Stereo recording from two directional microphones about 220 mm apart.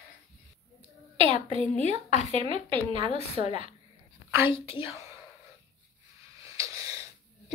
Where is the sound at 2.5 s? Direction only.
25° right (ahead or behind).